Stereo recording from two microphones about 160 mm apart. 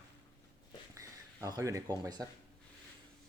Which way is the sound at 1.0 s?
20° right (ahead or behind).